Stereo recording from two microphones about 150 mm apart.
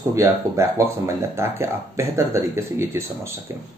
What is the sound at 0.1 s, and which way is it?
Speech, 20° right (ahead or behind).